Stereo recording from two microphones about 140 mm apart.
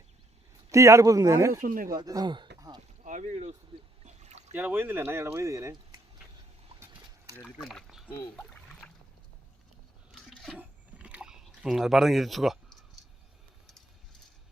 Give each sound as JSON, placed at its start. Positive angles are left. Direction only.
{"t": 0.7, "sound": "speech", "side_deg": -20}
{"t": 1.6, "sound": "speech", "side_deg": -85}
{"t": 1.9, "sound": "speech", "side_deg": -25}
{"t": 3.0, "sound": "speech", "side_deg": -60}
{"t": 4.0, "sound": "a sound", "side_deg": -55}
{"t": 4.5, "sound": "speech", "side_deg": -15}
{"t": 7.4, "sound": "speech", "side_deg": 0}
{"t": 8.4, "sound": "rowboat", "side_deg": 5}
{"t": 10.2, "sound": "a sound", "side_deg": 0}
{"t": 10.6, "sound": "chewing", "side_deg": -10}